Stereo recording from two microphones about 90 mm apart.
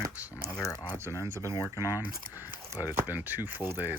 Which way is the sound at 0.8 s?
25° right (ahead or behind).